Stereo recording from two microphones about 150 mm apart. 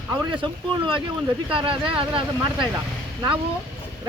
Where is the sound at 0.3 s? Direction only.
35° right (ahead or behind).